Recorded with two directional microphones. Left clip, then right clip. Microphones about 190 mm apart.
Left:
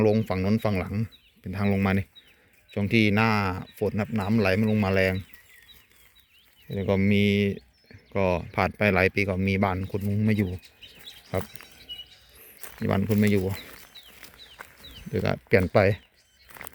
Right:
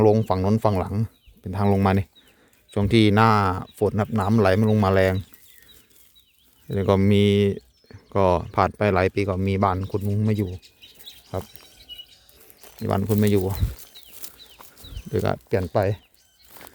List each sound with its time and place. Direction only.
0.0 s speech: 20° right (ahead or behind)
6.7 s speech: 40° right (ahead or behind); by 10.4 s 15° right (ahead or behind)
10.6 s bird: 75° right (ahead or behind)
11.7 s a sound: 70° right (ahead or behind)
12.8 s speech: 10° right (ahead or behind)
14.2 s chicken: 60° right (ahead or behind)
15.1 s speech: 15° right (ahead or behind)
15.4 s speech: 5° left (ahead or behind)